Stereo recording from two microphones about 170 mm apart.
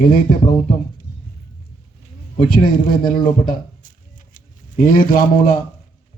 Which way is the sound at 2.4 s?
50° left (ahead or behind).